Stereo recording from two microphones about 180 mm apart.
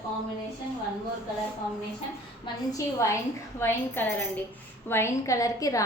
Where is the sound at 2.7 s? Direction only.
15° left (ahead or behind).